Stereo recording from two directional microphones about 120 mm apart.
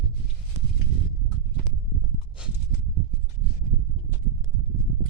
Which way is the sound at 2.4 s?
10° right (ahead or behind).